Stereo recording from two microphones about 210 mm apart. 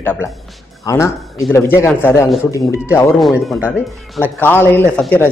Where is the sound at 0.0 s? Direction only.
10° left (ahead or behind).